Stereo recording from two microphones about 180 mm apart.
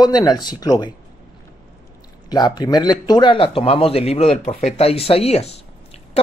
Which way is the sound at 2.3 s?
20° left (ahead or behind).